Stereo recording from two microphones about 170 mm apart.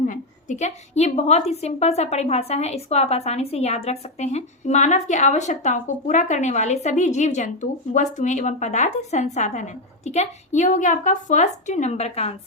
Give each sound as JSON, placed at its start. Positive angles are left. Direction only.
{"t": 0.0, "sound": "a woman's voice", "side_deg": 45}